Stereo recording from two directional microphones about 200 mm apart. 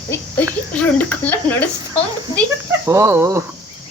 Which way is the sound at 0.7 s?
5° left (ahead or behind).